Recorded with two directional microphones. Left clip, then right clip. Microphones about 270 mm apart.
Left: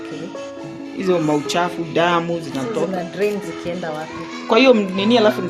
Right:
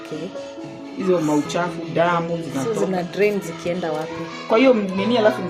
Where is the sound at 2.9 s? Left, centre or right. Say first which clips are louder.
Right 1 dB; centre.